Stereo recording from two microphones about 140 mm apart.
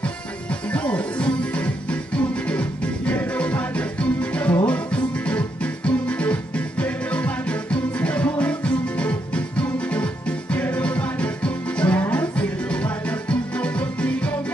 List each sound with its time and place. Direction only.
0.7 s music: 10° left (ahead or behind)